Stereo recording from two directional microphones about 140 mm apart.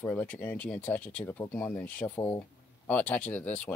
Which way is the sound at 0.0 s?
10° left (ahead or behind).